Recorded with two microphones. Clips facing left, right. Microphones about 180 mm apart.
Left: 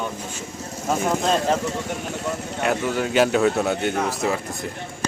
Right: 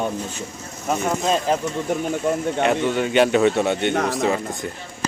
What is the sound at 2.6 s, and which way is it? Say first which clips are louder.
Speech: even; centre (ahead or behind).